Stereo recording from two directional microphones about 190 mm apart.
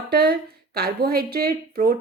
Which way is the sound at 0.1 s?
55° right (ahead or behind).